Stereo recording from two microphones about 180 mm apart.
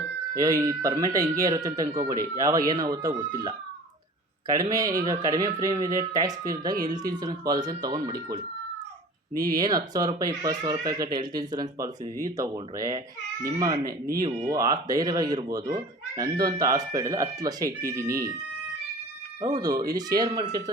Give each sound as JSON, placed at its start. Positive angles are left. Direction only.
{"t": 0.3, "sound": "speech", "side_deg": -20}
{"t": 19.4, "sound": "speech", "side_deg": -20}